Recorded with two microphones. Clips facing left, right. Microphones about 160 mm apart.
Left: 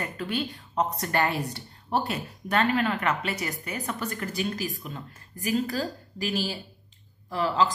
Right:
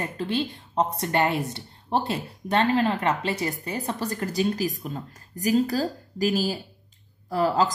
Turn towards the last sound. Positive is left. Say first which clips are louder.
# right 3 dB
turn(degrees=-40)  # may be behind; listen again after turning